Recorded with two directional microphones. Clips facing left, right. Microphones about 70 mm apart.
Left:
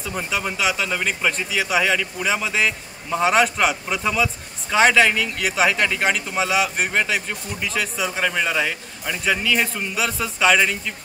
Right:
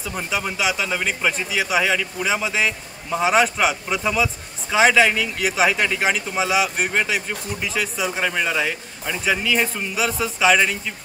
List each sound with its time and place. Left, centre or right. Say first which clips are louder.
0.0 s a man's voice: even; centre